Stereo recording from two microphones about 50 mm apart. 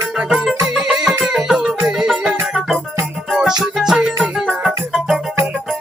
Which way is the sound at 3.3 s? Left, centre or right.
Centre.